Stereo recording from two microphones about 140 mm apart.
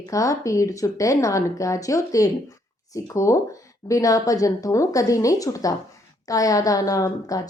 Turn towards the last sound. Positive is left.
turn(degrees=25)  # may be behind; listen again after turning